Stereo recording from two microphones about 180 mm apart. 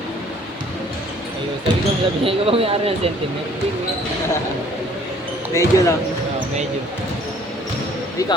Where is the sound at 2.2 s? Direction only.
30° right (ahead or behind).